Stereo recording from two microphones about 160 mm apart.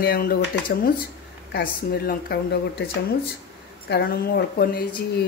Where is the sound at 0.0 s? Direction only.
70° left (ahead or behind).